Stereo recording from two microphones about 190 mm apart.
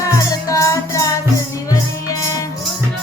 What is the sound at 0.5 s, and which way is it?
Music, 15° left (ahead or behind).